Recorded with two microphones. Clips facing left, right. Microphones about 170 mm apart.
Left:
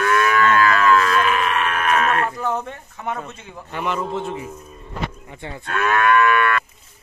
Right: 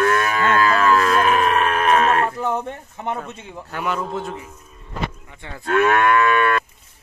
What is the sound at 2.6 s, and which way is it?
Livestock, 25° right (ahead or behind).